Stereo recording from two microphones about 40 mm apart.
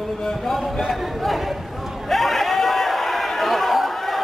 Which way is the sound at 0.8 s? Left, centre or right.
Centre.